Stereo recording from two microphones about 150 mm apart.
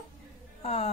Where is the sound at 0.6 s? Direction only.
45° left (ahead or behind).